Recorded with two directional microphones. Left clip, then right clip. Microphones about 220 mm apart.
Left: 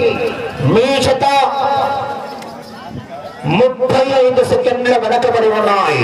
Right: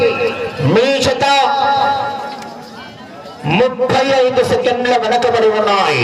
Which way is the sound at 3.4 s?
35° right (ahead or behind).